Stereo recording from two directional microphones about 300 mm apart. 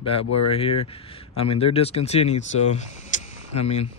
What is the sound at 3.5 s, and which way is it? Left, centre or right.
Speech, left.